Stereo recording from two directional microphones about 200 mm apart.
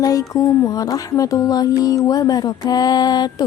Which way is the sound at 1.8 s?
15° left (ahead or behind).